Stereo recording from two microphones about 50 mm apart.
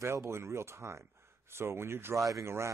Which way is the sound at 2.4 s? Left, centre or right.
Right.